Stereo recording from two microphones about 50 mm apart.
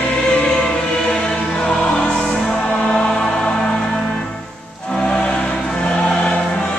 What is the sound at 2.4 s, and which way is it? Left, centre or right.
Music, centre.